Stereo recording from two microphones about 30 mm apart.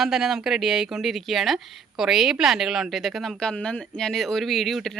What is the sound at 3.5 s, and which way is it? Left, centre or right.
Speech, left.